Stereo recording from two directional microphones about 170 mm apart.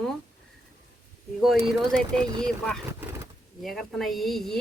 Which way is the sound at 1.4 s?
Centre (ahead or behind).